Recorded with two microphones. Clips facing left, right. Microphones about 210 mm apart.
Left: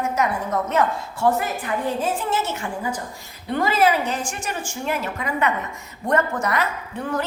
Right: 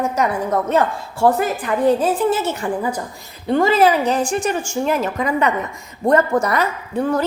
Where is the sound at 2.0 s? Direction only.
35° right (ahead or behind).